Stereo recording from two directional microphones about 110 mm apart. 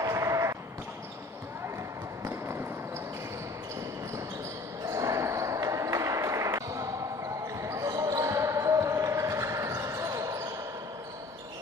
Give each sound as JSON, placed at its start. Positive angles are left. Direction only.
{"t": 0.0, "sound": "a sound", "side_deg": -25}
{"t": 2.2, "sound": "basketball bounce", "side_deg": -25}
{"t": 4.8, "sound": "basketball bounce", "side_deg": -30}